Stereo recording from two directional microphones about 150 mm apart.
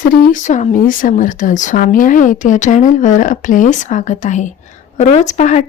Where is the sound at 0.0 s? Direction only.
70° left (ahead or behind).